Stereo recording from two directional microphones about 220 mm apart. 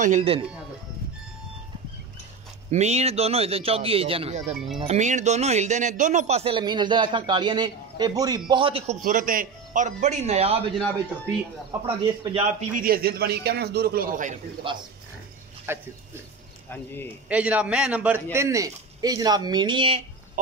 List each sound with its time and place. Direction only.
0.0 s speech: 30° right (ahead or behind)
2.7 s speech: 30° right (ahead or behind)
11.8 s speech: 25° right (ahead or behind)
12.7 s a man's voice: 40° right (ahead or behind)
14.7 s speech: 20° right (ahead or behind)
15.7 s a man's voice: 10° right (ahead or behind)
16.7 s speech: 10° left (ahead or behind)
17.3 s a man's voice: 5° right (ahead or behind); by 20.0 s 20° right (ahead or behind)